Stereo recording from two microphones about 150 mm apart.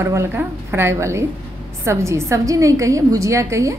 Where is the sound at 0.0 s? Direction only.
20° right (ahead or behind).